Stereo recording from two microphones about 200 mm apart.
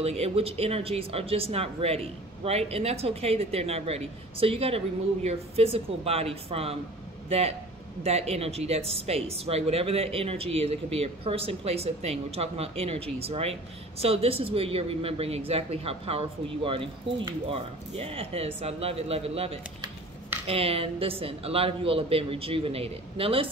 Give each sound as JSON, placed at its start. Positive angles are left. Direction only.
{"t": 0.0, "sound": "speech", "side_deg": -30}